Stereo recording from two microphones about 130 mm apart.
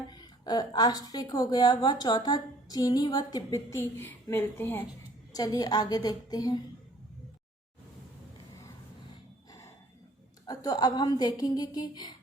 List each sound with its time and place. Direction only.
0.1 s a woman's voice: 30° left (ahead or behind); by 4.9 s 15° left (ahead or behind)
5.3 s a woman's voice: 30° left (ahead or behind)
9.5 s a sound: 25° left (ahead or behind)
10.4 s a woman's voice: 30° left (ahead or behind)